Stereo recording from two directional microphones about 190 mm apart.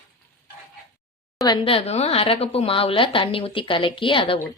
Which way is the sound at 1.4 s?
30° left (ahead or behind).